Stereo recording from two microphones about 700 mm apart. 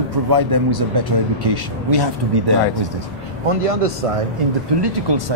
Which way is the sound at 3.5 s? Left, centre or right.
Right.